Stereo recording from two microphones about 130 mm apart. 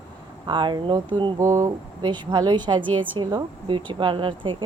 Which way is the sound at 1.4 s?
25° right (ahead or behind).